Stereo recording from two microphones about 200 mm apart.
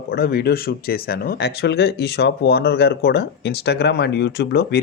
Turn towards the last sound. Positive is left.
turn(degrees=55)  # may be behind; listen again after turning